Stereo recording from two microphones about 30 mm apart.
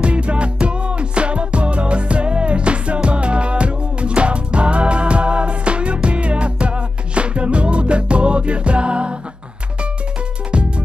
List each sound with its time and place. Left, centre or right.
0.0 s music: right